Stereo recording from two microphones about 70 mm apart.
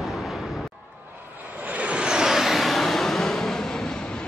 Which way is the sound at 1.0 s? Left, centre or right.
Right.